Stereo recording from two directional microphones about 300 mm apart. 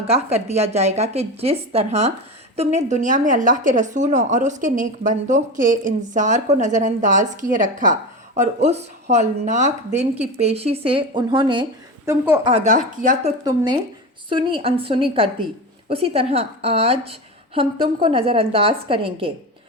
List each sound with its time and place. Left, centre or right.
0.1 s a woman's voice: right
12.5 s a woman's voice: right